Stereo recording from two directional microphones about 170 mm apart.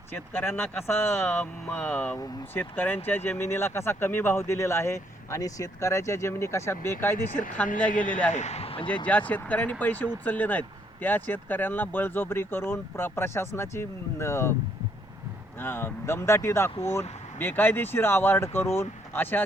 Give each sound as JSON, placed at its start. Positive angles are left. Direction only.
{"t": 0.1, "sound": "speech", "side_deg": 15}
{"t": 7.9, "sound": "a man's voice", "side_deg": 50}
{"t": 9.0, "sound": "speech", "side_deg": 10}
{"t": 15.5, "sound": "speech", "side_deg": 15}